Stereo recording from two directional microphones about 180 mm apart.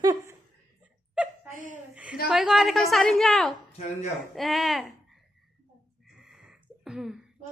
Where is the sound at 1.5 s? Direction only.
45° right (ahead or behind).